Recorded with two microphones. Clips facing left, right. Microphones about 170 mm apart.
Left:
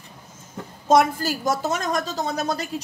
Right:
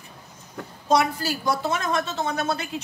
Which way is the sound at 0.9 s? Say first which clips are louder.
Left 4 dB; 50° left (ahead or behind).